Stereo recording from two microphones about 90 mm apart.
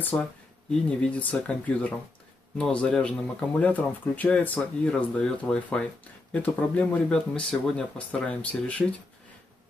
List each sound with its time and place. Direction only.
0.1 s speech: 15° left (ahead or behind)